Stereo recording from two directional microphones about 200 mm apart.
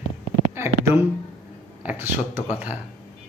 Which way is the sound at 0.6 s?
10° right (ahead or behind).